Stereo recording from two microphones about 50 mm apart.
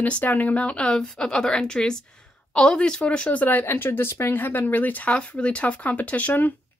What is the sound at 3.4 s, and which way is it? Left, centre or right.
Speech, left.